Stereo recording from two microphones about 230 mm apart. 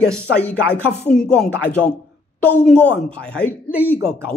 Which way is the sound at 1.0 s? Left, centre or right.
Centre.